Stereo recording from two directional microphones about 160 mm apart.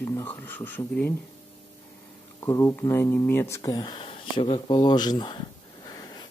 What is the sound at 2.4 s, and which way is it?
Speech, 15° left (ahead or behind).